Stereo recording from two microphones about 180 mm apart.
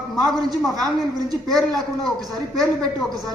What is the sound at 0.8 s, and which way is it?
Speech, 20° right (ahead or behind).